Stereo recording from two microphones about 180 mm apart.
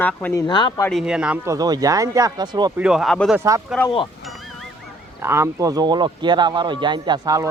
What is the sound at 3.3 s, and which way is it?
Speech, 15° right (ahead or behind).